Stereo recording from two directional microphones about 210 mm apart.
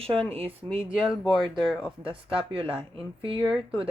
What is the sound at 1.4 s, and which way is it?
Speech, centre (ahead or behind).